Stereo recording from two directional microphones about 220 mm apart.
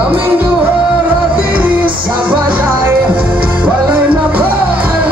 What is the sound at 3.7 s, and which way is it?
Music, 5° right (ahead or behind).